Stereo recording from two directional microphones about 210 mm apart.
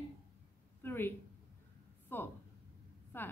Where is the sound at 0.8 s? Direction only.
10° left (ahead or behind).